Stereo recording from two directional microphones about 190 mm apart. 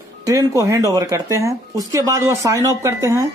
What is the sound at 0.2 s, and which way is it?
Speech, 15° right (ahead or behind).